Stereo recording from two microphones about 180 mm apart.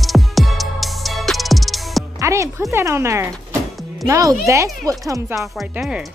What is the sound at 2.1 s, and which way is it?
Speech, 15° right (ahead or behind).